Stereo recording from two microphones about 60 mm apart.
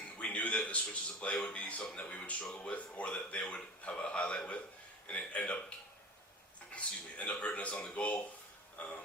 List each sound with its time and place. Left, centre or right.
0.2 s speech: left
6.7 s speech: centre